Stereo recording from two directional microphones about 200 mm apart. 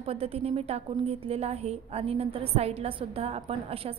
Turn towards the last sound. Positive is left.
turn(degrees=-30)  # may be behind; listen again after turning